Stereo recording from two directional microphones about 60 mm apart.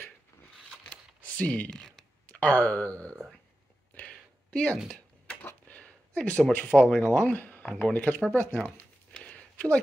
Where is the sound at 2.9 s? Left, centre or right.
Right.